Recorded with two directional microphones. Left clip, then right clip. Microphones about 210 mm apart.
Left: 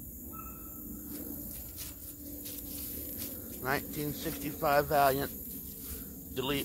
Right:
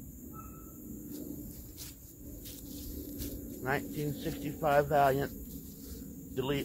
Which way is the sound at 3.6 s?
15° left (ahead or behind).